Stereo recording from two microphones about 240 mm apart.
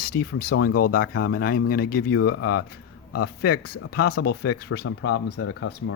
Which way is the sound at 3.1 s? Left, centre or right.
Left.